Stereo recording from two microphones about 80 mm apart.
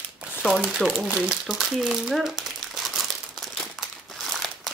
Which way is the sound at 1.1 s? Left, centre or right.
Centre.